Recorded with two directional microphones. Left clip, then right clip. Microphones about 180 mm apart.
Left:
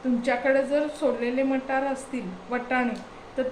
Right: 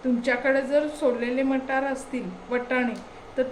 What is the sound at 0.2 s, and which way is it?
A woman's voice, 20° right (ahead or behind).